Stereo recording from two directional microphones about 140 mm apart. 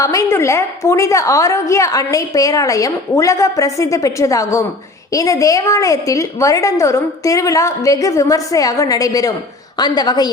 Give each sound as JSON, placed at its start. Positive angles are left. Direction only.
{"t": 0.0, "sound": "a woman's voice", "side_deg": 25}